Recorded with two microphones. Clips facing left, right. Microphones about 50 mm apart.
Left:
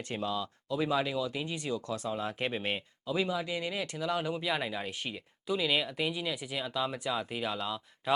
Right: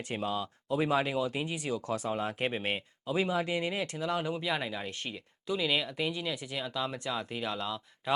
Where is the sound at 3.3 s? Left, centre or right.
Right.